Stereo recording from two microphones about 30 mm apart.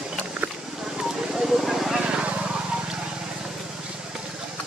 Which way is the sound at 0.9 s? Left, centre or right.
Centre.